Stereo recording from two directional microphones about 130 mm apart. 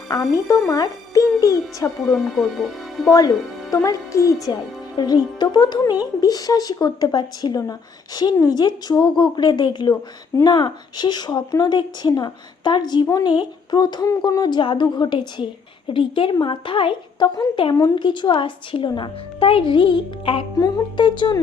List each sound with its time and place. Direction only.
0.1 s a child's voice: 25° left (ahead or behind)
2.1 s speech: centre (ahead or behind)
3.1 s a woman's voice: 30° left (ahead or behind)